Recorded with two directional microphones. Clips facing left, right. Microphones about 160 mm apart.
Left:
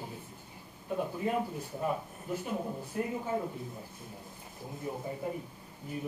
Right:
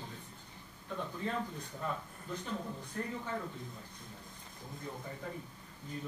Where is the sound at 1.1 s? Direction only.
15° left (ahead or behind).